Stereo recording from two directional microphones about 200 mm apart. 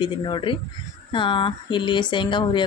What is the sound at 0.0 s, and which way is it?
Speech, 25° left (ahead or behind).